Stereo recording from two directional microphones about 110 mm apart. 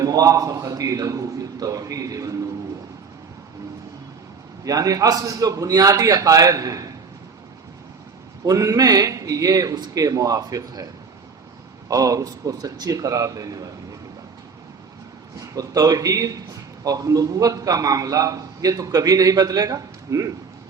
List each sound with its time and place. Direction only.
0.0 s a man's voice: 30° right (ahead or behind)
4.6 s a man's voice: 30° right (ahead or behind)
8.4 s a man's voice: 30° right (ahead or behind)
11.9 s a man's voice: 30° right (ahead or behind)
15.4 s a man's voice: 35° right (ahead or behind)